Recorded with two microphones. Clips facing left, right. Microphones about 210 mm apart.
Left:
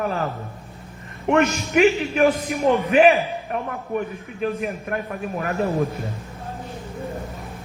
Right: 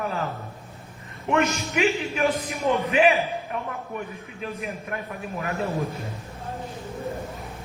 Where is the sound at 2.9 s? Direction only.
55° left (ahead or behind).